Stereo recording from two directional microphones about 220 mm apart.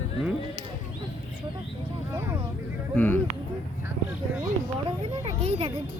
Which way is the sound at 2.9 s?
5° left (ahead or behind).